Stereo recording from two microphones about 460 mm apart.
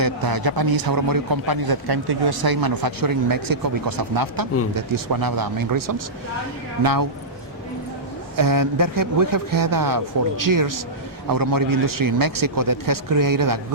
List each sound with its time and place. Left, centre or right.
0.0 s a man's voice: right
8.4 s a man's voice: right